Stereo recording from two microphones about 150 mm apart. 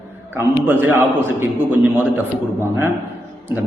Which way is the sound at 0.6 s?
10° right (ahead or behind).